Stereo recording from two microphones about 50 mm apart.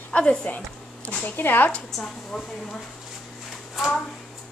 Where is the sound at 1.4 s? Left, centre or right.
Left.